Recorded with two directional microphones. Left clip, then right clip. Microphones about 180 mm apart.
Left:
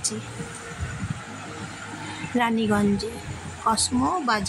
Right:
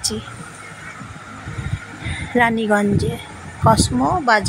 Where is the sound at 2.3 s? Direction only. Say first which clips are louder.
Right 7 dB; 15° right (ahead or behind).